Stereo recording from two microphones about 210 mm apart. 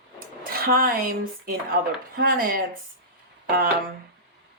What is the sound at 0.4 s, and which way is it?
Speech, 45° right (ahead or behind).